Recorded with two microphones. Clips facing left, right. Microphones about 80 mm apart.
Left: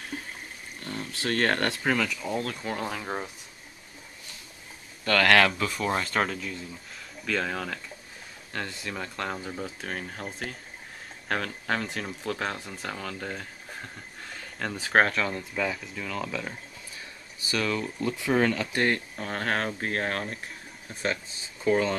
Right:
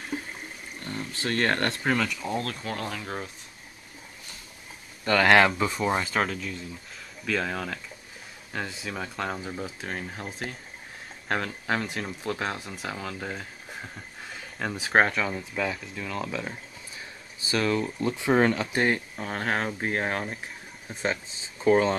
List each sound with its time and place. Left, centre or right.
0.8 s a sound: centre
1.8 s speech: centre
5.0 s speech: centre
5.8 s speech: centre
17.4 s speech: right